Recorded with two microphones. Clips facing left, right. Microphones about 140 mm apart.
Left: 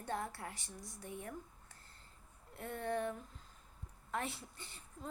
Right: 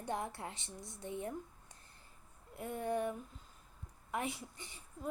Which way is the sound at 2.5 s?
10° right (ahead or behind).